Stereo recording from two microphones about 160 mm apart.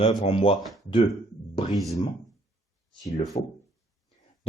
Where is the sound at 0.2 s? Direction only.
35° left (ahead or behind).